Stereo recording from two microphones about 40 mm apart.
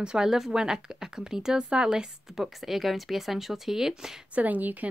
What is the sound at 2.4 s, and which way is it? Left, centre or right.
A woman's voice, centre.